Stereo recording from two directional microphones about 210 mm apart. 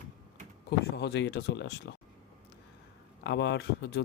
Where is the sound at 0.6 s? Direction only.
50° left (ahead or behind).